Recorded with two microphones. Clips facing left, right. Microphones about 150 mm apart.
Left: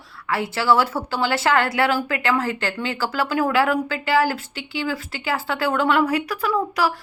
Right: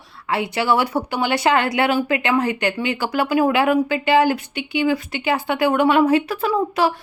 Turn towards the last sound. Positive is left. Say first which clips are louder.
# right 3 dB
turn(degrees=-25)  # may be behind; listen again after turning